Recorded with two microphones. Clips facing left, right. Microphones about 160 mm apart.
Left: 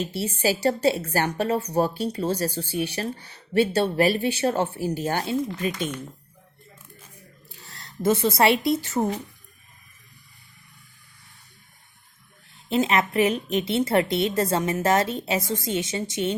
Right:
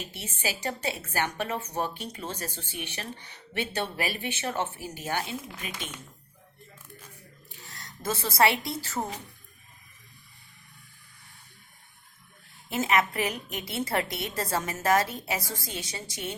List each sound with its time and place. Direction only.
0.1 s a woman's voice: 35° left (ahead or behind)
7.6 s speech: 35° left (ahead or behind)
12.6 s a woman's voice: 25° left (ahead or behind)